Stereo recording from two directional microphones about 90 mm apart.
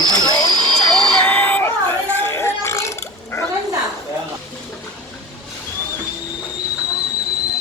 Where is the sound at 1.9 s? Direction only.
25° left (ahead or behind).